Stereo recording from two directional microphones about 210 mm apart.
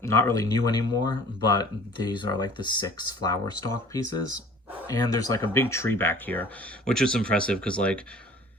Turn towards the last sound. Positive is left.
turn(degrees=5)  # may be behind; listen again after turning